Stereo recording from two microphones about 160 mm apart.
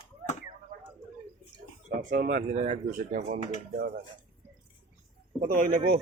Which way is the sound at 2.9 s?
60° right (ahead or behind).